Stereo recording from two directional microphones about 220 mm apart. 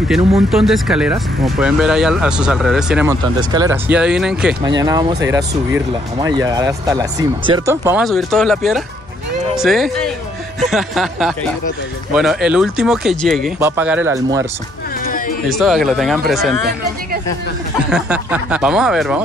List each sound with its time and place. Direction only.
0.5 s speech: centre (ahead or behind)
3.3 s speech: 15° right (ahead or behind)
4.6 s speech: 15° right (ahead or behind)
8.0 s speech: centre (ahead or behind)
13.6 s speech: 10° right (ahead or behind)
15.0 s music: 40° left (ahead or behind)
15.5 s speech: centre (ahead or behind)
16.6 s speech: 45° right (ahead or behind)
17.8 s speech: 5° right (ahead or behind)